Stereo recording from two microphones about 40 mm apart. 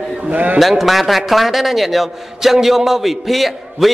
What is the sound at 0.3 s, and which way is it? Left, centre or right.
Speech, right.